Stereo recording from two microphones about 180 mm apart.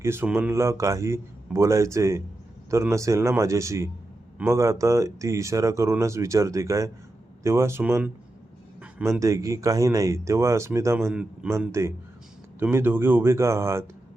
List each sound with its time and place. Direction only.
0.0 s speech: 15° right (ahead or behind)
8.8 s a sound: 5° right (ahead or behind)
9.2 s speech: 15° right (ahead or behind)